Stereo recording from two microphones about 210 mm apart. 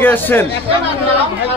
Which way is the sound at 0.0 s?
10° left (ahead or behind).